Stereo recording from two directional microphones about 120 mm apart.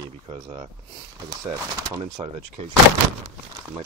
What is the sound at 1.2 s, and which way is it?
Speech, 30° right (ahead or behind).